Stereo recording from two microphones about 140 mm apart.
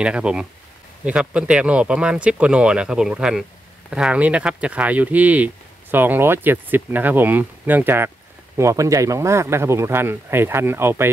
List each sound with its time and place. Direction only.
0.0 s speech: 5° right (ahead or behind)